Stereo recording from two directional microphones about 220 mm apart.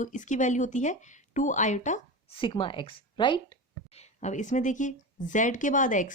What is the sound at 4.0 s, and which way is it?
A woman's voice, 30° left (ahead or behind).